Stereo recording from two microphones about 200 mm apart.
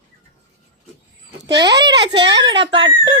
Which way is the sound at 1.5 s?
20° right (ahead or behind).